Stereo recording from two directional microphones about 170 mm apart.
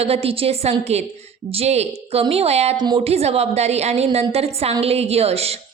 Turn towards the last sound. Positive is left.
turn(degrees=-35)  # may be behind; listen again after turning